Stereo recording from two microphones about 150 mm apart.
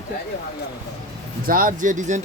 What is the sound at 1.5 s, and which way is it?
Speech, 65° right (ahead or behind).